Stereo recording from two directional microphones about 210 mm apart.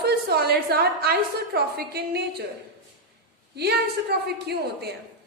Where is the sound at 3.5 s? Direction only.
50° right (ahead or behind).